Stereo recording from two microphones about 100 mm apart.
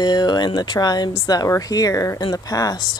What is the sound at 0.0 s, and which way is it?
Speech, 45° left (ahead or behind).